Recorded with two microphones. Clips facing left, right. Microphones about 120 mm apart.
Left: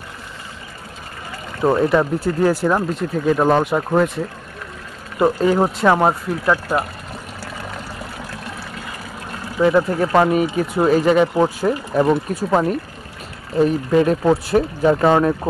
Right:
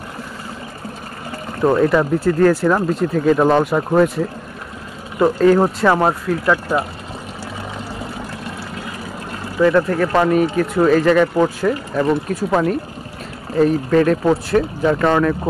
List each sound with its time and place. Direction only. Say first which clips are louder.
1.6 s speech: right 1 dB; 10° left (ahead or behind)
5.2 s speech: right 3 dB; 5° left (ahead or behind)
9.6 s speech: right 1 dB; 15° left (ahead or behind)
13.6 s speech: right 1 dB; 15° left (ahead or behind)
14.2 s speech: even; 5° left (ahead or behind)